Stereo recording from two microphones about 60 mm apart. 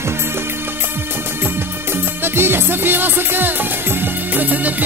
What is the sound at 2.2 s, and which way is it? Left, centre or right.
Music, right.